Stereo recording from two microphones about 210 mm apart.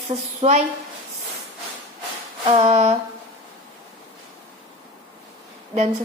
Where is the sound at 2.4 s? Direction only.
30° right (ahead or behind).